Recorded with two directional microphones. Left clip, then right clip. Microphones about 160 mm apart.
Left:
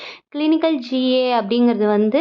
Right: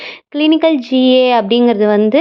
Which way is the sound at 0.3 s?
40° right (ahead or behind).